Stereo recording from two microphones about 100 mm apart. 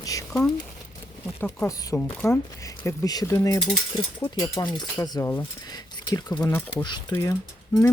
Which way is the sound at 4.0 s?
45° left (ahead or behind).